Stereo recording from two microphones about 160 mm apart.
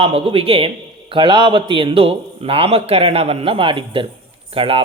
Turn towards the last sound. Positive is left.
turn(degrees=-35)  # may be behind; listen again after turning